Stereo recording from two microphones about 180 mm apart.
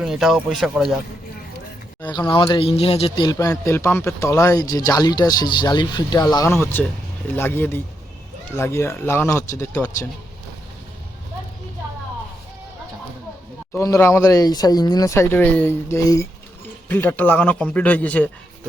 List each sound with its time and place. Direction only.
0.0 s speech: centre (ahead or behind)
2.0 s speech: 25° left (ahead or behind)
3.3 s speech: 15° left (ahead or behind)
13.7 s speech: 15° left (ahead or behind)